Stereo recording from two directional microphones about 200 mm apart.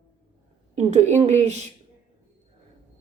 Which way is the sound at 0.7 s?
35° right (ahead or behind).